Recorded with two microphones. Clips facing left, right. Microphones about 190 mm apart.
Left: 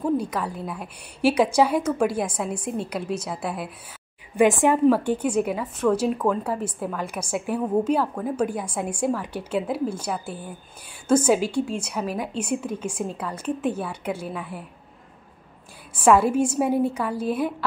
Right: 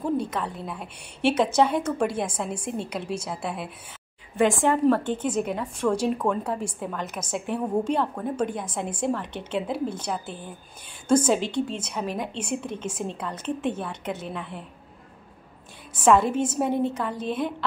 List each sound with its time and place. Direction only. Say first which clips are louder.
0.6 s a woman's voice: left 2 dB; centre (ahead or behind)
4.4 s a woman's voice: left 3 dB; 15° left (ahead or behind)
16.0 s a woman's voice: left 2 dB; 10° left (ahead or behind)